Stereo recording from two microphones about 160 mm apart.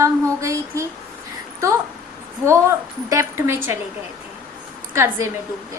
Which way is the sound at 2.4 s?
20° right (ahead or behind).